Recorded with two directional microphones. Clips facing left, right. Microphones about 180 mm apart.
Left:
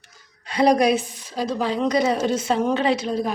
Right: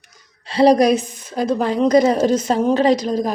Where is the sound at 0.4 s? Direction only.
30° right (ahead or behind).